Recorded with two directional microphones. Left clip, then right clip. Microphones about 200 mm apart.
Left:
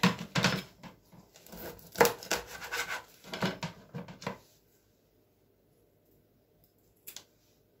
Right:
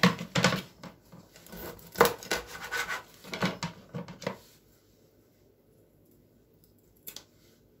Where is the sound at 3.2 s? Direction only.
5° right (ahead or behind).